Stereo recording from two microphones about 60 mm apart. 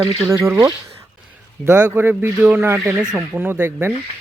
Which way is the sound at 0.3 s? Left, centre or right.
Right.